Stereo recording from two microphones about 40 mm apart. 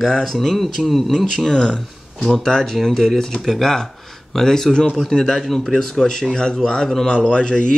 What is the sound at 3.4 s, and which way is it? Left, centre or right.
Speech, centre.